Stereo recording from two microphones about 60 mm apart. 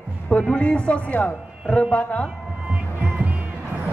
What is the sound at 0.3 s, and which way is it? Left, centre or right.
A man's voice, centre.